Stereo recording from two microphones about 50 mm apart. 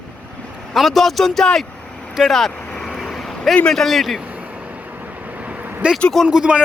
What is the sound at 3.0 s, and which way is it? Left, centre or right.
Vehicle, centre.